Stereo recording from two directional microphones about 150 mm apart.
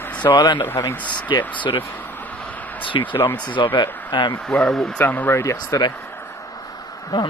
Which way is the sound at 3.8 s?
10° left (ahead or behind).